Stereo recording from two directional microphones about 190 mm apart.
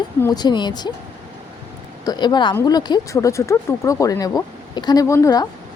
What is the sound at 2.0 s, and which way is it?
Speech, 20° left (ahead or behind).